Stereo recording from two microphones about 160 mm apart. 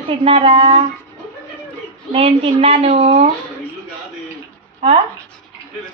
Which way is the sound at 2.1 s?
35° right (ahead or behind).